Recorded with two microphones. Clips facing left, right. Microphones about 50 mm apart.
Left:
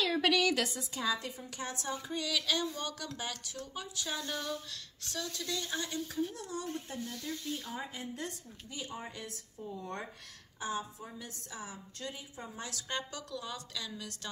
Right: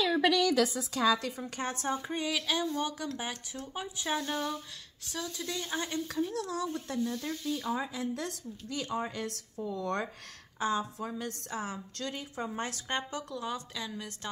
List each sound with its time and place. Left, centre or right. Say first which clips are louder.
0.9 s a woman's voice: right 7 dB; right
1.6 s speech: right 5 dB; right
2.2 s speech: right 1 dB; centre
3.2 s a woman's voice: right 2 dB; right
5.0 s speech: right 2 dB; centre
6.0 s speech: right 4 dB; right
10.6 s a woman's voice: right 6 dB; right
12.6 s a woman's voice: right 4 dB; right